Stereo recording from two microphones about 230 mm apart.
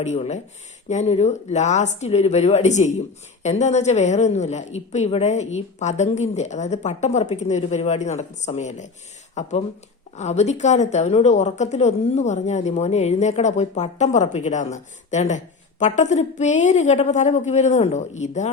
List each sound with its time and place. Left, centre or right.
0.0 s a woman's voice: left